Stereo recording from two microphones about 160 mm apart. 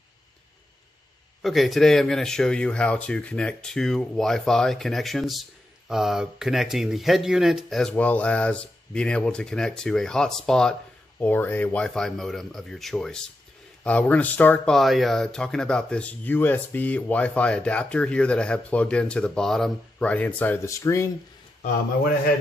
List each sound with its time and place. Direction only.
1.4 s speech: centre (ahead or behind); by 21.1 s 20° left (ahead or behind)